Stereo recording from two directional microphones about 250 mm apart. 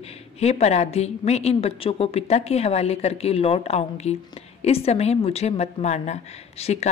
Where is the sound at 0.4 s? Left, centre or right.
Left.